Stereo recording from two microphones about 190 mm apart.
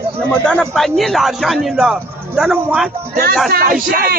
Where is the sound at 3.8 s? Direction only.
50° right (ahead or behind).